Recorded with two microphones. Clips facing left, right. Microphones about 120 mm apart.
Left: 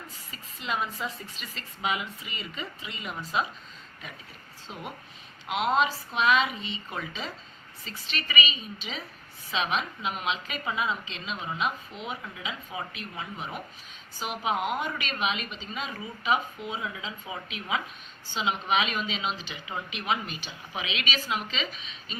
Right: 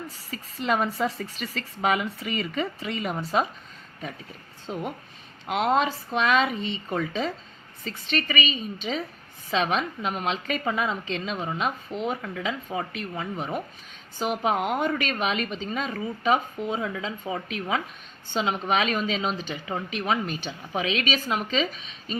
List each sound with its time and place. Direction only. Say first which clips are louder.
0.6 s a woman's voice: right 7 dB; 50° right (ahead or behind)
4.6 s a woman's voice: right 8 dB; 45° right (ahead or behind)